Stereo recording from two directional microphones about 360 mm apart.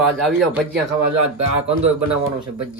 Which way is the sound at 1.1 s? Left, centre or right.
Right.